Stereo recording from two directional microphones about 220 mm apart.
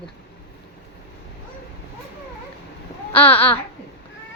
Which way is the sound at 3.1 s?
25° left (ahead or behind).